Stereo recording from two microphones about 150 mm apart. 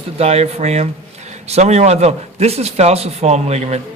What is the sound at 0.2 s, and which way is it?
A man's voice, 45° right (ahead or behind).